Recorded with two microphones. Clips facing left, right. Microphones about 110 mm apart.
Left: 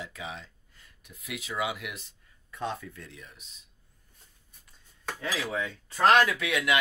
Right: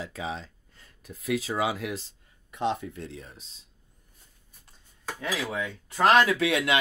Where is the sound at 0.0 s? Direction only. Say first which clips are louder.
Right 5 dB; 35° right (ahead or behind).